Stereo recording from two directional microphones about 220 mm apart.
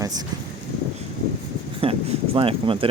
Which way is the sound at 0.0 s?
15° right (ahead or behind).